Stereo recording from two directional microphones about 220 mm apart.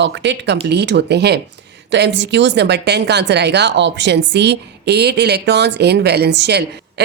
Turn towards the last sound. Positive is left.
turn(degrees=-50)  # may be behind; listen again after turning